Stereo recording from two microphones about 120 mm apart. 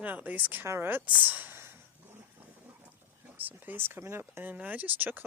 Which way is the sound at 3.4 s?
15° right (ahead or behind).